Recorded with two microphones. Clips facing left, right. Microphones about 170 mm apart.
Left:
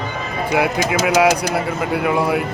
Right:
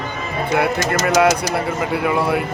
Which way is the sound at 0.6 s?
5° left (ahead or behind).